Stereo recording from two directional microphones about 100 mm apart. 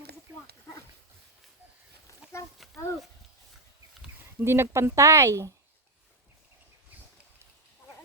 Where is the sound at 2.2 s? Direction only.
10° right (ahead or behind).